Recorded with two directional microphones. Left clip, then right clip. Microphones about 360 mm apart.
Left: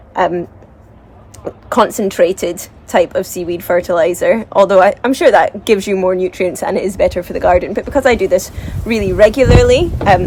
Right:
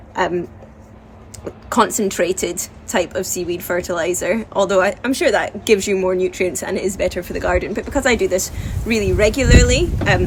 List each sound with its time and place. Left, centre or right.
0.1 s speech: centre
1.5 s a woman's voice: centre